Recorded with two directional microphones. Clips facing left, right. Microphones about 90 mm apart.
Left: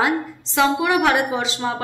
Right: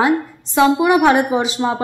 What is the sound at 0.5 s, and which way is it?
A woman's voice, 25° right (ahead or behind).